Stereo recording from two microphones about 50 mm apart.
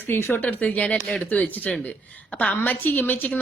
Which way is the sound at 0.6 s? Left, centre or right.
Left.